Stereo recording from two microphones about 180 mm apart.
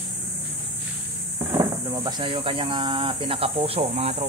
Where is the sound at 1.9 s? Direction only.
25° right (ahead or behind).